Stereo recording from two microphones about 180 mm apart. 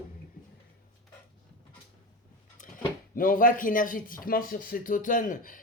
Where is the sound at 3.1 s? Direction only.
50° left (ahead or behind).